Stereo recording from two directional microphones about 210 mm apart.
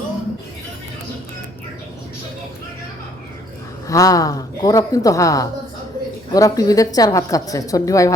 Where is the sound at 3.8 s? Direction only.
15° left (ahead or behind).